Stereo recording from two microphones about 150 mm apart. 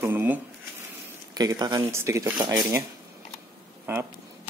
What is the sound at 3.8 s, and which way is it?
Speech, 15° right (ahead or behind).